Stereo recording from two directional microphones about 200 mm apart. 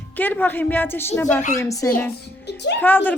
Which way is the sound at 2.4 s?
60° left (ahead or behind).